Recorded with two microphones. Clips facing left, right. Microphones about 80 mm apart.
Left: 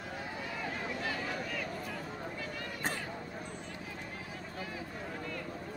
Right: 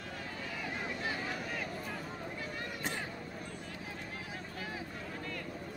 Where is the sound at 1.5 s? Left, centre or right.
Right.